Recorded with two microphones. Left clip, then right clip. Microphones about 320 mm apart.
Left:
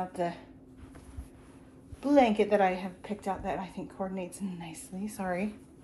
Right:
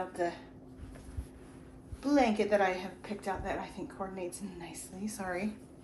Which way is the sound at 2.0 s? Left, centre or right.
Left.